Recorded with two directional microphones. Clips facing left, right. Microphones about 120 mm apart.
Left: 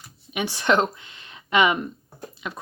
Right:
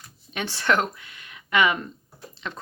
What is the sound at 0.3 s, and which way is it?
Speech, 15° left (ahead or behind).